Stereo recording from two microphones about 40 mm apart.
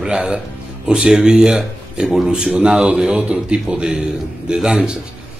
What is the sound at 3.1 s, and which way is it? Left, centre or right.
Speech, right.